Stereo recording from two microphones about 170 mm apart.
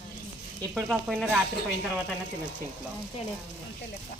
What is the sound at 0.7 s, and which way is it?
Speech, 5° right (ahead or behind).